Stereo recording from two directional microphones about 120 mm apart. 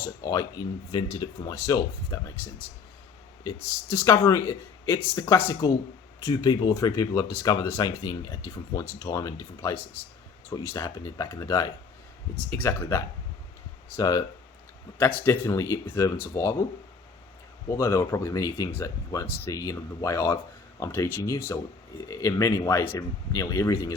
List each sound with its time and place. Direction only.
0.0 s speech: 30° left (ahead or behind)
14.9 s speech: 15° left (ahead or behind)
17.7 s speech: 25° left (ahead or behind)